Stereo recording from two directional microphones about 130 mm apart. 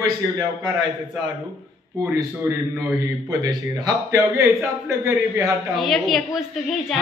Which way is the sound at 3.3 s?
30° right (ahead or behind).